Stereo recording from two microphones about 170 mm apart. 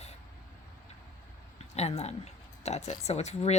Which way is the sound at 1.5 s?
40° left (ahead or behind).